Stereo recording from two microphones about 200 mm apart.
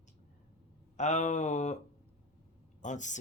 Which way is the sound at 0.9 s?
35° left (ahead or behind).